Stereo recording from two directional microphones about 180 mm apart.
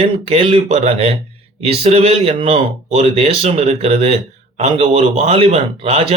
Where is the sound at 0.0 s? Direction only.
30° right (ahead or behind).